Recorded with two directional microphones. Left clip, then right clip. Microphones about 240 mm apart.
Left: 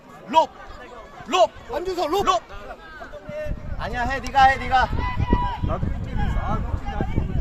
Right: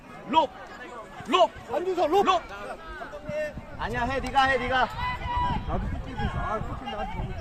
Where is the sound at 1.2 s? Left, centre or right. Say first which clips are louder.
Left 3 dB; left.